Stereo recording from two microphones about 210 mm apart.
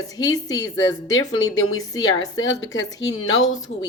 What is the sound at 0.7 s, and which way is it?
A woman's voice, 65° left (ahead or behind).